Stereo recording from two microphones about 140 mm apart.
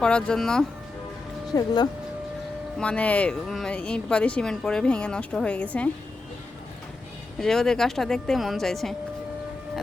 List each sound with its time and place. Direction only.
0.0 s speech: 5° left (ahead or behind)
1.5 s speech: 30° left (ahead or behind)
2.7 s speech: 10° left (ahead or behind)
7.3 s speech: 5° left (ahead or behind)